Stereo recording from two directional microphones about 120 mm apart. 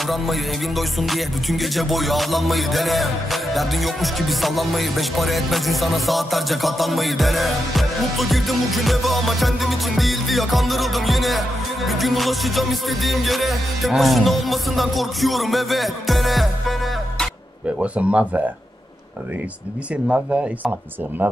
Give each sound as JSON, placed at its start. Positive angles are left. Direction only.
{"t": 0.0, "sound": "music", "side_deg": 0}
{"t": 17.7, "sound": "speech", "side_deg": -10}
{"t": 21.2, "sound": "speech", "side_deg": -15}